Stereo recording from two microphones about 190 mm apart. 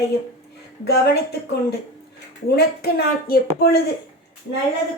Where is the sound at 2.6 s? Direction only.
55° left (ahead or behind).